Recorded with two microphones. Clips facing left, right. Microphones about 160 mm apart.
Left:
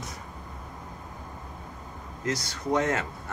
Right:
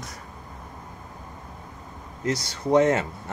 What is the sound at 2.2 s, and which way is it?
Speech, 25° right (ahead or behind).